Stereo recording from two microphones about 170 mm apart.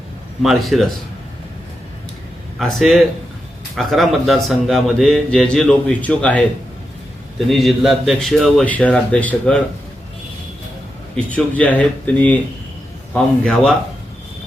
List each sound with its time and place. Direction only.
0.4 s a man's voice: centre (ahead or behind)
2.6 s a man's voice: centre (ahead or behind)
11.3 s a man's voice: 10° left (ahead or behind)